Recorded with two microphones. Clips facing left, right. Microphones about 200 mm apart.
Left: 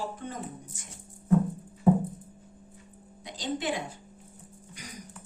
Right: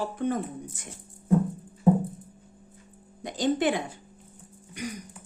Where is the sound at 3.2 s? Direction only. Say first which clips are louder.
Right 7 dB; 50° right (ahead or behind).